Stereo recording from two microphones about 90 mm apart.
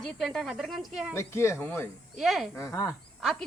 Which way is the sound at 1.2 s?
30° left (ahead or behind).